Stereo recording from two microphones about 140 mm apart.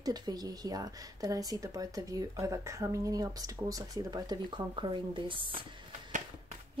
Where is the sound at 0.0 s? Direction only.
30° right (ahead or behind).